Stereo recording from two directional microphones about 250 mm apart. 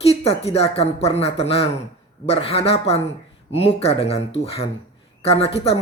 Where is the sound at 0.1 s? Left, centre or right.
Left.